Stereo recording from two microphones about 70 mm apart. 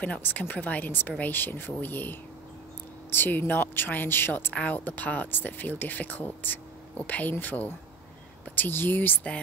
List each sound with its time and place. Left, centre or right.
0.0 s speech: left